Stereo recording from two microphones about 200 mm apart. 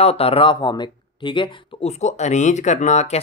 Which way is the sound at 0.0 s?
30° left (ahead or behind).